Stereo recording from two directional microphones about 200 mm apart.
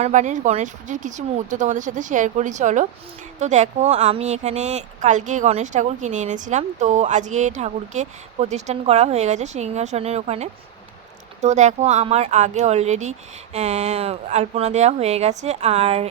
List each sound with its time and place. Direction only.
0.0 s speech: 35° right (ahead or behind)